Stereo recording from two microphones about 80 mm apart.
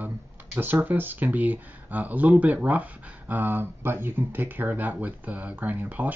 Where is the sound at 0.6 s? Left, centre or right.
Right.